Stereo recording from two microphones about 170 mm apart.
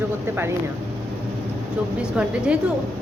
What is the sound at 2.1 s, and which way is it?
Speech, 5° right (ahead or behind).